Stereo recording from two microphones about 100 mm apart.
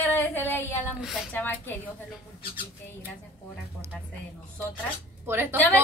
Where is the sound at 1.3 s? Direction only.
20° left (ahead or behind).